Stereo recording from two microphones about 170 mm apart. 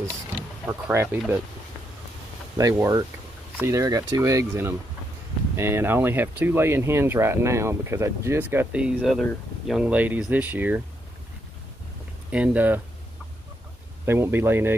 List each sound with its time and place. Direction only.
0.7 s speech: 10° right (ahead or behind)
2.5 s speech: 20° right (ahead or behind)
12.3 s speech: 10° right (ahead or behind)
14.0 s speech: 10° right (ahead or behind)